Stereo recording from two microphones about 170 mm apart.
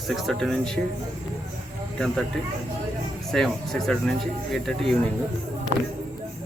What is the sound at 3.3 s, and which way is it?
A man's voice, 5° left (ahead or behind).